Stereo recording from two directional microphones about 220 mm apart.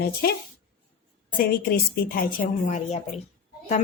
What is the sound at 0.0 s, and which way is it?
Speech, 45° left (ahead or behind).